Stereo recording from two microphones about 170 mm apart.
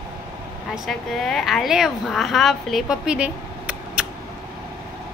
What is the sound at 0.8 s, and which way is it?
Speech, centre (ahead or behind).